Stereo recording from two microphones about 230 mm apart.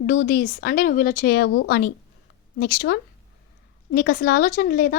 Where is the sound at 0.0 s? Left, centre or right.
Left.